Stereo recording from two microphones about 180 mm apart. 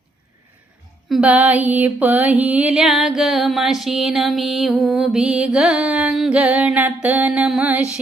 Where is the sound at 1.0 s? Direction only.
5° right (ahead or behind).